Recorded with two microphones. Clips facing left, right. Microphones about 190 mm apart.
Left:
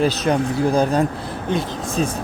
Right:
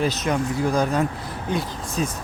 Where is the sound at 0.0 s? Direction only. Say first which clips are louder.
Left 4 dB; 35° left (ahead or behind).